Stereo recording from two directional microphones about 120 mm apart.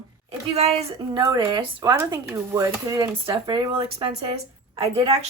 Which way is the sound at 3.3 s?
45° right (ahead or behind).